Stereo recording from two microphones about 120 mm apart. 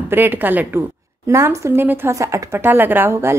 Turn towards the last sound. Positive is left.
turn(degrees=-20)  # may be behind; listen again after turning